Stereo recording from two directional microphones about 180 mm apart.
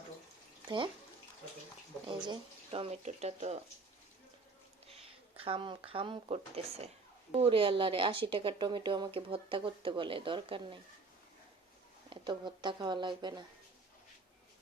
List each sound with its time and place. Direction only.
2.2 s speech: 30° right (ahead or behind)
5.4 s speech: 30° right (ahead or behind)
12.1 s speech: 25° right (ahead or behind)